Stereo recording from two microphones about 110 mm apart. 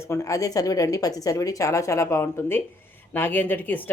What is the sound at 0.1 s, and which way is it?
Speech, 30° left (ahead or behind).